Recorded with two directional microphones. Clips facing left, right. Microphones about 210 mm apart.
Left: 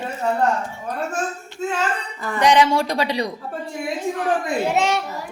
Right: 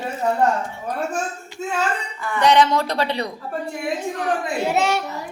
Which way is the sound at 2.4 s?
15° left (ahead or behind).